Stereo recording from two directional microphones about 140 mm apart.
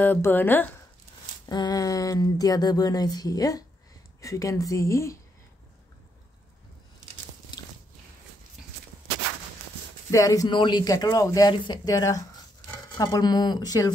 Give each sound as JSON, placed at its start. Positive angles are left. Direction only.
{"t": 0.0, "sound": "speech", "side_deg": 15}
{"t": 1.4, "sound": "speech", "side_deg": 30}
{"t": 7.5, "sound": "biting", "side_deg": 30}
{"t": 10.1, "sound": "speech", "side_deg": 25}
{"t": 10.5, "sound": "speech", "side_deg": 35}